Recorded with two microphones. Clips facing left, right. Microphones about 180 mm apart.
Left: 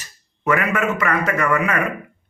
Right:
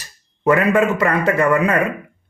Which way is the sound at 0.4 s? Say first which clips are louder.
Right 5 dB; 30° right (ahead or behind).